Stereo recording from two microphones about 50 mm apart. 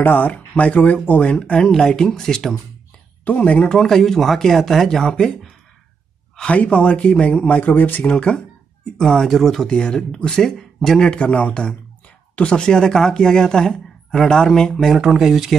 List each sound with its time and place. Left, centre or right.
0.0 s speech: left
1.3 s a woman's voice: centre
3.3 s speech: left
3.7 s a woman's voice: centre
6.5 s speech: left
8.1 s speech: left
8.9 s speech: centre
9.7 s a woman's voice: centre
11.1 s a woman's voice: left
15.0 s speech: centre